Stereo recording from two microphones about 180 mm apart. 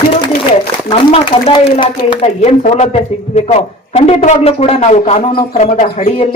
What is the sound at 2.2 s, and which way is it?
Speech, 40° left (ahead or behind).